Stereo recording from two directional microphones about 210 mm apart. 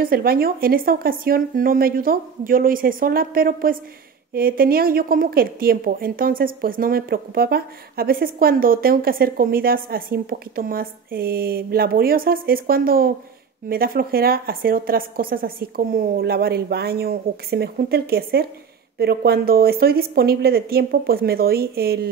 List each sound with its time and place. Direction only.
0.0 s a woman's voice: 45° right (ahead or behind)